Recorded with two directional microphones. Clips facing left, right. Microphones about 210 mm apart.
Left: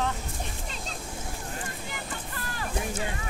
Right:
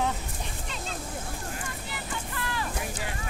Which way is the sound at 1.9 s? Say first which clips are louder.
Right 1 dB; 45° left (ahead or behind).